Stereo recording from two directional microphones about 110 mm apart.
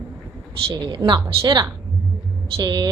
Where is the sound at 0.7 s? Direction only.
40° right (ahead or behind).